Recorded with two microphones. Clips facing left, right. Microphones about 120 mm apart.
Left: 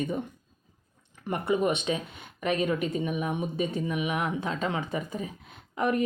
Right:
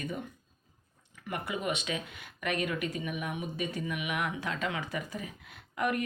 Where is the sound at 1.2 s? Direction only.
35° left (ahead or behind).